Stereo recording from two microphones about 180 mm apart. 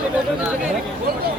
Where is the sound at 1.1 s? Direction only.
60° right (ahead or behind).